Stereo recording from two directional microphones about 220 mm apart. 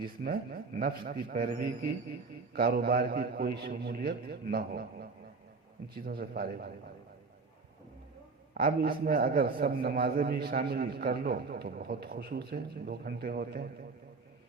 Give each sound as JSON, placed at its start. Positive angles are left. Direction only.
{"t": 0.3, "sound": "a man's voice", "side_deg": -40}
{"t": 8.5, "sound": "a man's voice", "side_deg": -40}